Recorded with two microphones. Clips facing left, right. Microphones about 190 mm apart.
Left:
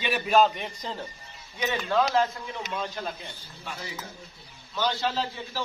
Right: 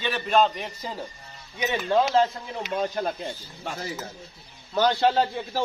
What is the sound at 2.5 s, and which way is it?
A man's voice, 45° right (ahead or behind).